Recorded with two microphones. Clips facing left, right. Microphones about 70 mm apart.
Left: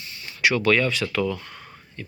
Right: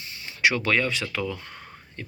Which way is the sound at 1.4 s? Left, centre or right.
Right.